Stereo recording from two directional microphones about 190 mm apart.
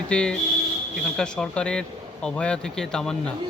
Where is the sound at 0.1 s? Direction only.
5° left (ahead or behind).